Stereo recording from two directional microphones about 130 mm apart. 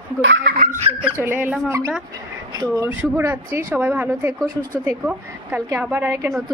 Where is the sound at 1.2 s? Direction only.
15° right (ahead or behind).